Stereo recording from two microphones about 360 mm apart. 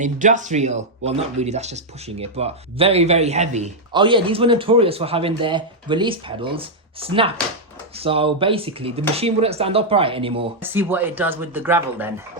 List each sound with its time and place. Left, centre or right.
0.0 s speech: right